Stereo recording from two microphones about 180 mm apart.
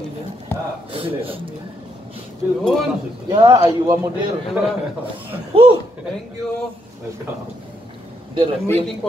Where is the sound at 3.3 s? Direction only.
25° right (ahead or behind).